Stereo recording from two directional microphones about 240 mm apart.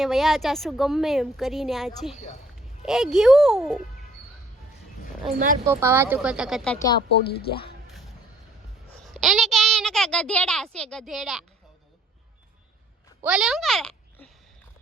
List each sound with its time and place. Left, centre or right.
0.0 s a woman's voice: centre
5.6 s a woman's voice: centre
7.1 s speech: left
9.1 s a child's voice: centre
13.2 s speech: centre